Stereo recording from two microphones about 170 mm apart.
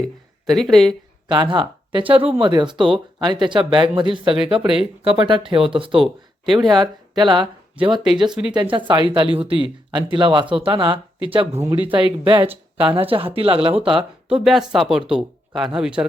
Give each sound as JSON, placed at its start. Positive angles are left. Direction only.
{"t": 0.4, "sound": "speech", "side_deg": 0}
{"t": 1.3, "sound": "speech", "side_deg": -30}
{"t": 6.0, "sound": "speech", "side_deg": 0}
{"t": 7.2, "sound": "speech", "side_deg": -25}
{"t": 8.3, "sound": "speech", "side_deg": -5}
{"t": 8.5, "sound": "speech", "side_deg": -30}
{"t": 14.3, "sound": "speech", "side_deg": 0}